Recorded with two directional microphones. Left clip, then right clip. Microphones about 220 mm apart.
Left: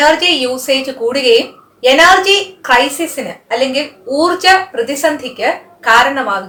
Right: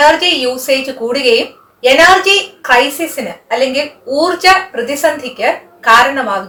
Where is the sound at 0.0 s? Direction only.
15° left (ahead or behind).